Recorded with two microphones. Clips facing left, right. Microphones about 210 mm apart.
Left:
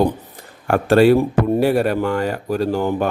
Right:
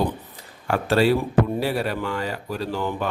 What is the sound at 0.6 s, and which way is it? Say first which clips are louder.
Speech: left 7 dB; 50° left (ahead or behind).